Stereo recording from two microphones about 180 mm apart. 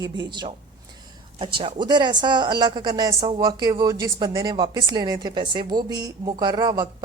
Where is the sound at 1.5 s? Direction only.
25° right (ahead or behind).